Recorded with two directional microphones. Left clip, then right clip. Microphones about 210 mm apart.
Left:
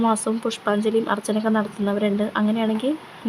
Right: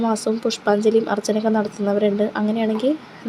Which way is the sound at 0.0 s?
Centre (ahead or behind).